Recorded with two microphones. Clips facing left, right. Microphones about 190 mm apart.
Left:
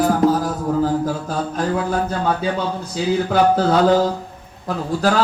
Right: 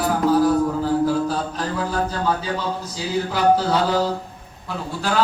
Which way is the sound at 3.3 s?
50° left (ahead or behind).